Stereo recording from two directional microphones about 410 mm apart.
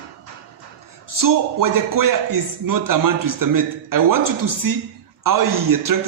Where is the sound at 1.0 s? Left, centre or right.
Right.